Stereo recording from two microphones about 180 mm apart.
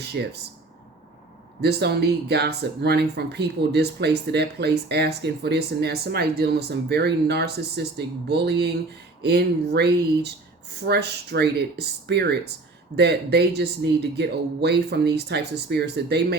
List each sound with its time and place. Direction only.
0.0 s speech: 65° right (ahead or behind)
1.6 s speech: 65° right (ahead or behind)